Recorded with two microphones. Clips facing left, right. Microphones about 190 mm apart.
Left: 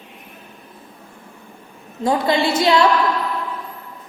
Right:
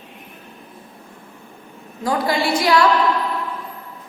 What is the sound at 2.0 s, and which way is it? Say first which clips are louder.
Speech: left 2 dB; 25° left (ahead or behind).